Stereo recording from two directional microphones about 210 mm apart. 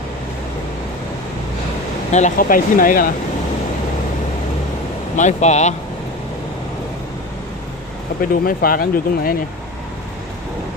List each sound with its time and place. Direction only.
2.1 s speech: 40° left (ahead or behind)
5.1 s speech: 35° left (ahead or behind)
8.2 s speech: 45° left (ahead or behind)